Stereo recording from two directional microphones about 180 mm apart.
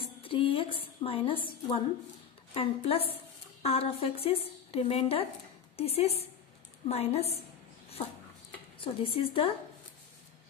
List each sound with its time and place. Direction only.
0.0 s a woman's voice: 30° left (ahead or behind)
8.7 s a woman's voice: 30° left (ahead or behind)